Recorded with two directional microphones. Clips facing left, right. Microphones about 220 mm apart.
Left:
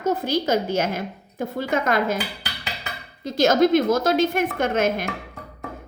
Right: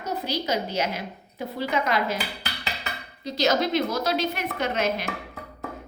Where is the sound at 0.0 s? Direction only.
50° left (ahead or behind).